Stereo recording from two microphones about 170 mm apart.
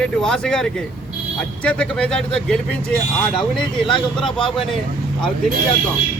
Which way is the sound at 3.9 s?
5° left (ahead or behind).